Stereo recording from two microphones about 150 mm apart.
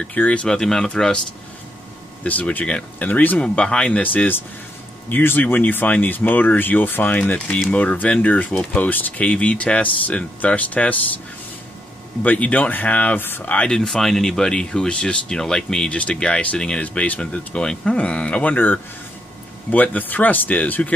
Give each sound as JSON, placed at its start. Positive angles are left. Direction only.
{"t": 0.0, "sound": "speech", "side_deg": 10}
{"t": 2.2, "sound": "speech", "side_deg": 10}
{"t": 12.2, "sound": "speech", "side_deg": 10}